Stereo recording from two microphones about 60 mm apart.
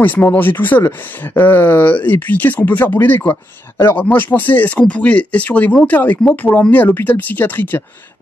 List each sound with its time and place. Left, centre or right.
0.0 s speech: left
3.9 s speech: left